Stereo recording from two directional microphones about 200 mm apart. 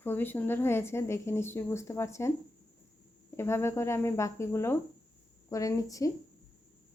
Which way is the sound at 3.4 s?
10° left (ahead or behind).